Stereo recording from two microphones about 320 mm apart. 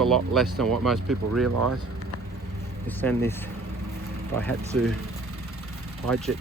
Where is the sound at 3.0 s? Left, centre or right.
Centre.